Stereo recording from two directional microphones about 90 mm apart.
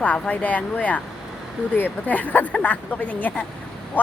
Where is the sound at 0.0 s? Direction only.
15° left (ahead or behind).